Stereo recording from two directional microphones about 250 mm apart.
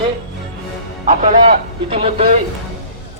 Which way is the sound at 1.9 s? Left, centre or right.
Right.